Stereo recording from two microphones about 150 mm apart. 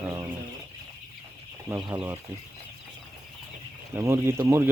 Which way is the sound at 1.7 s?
15° right (ahead or behind).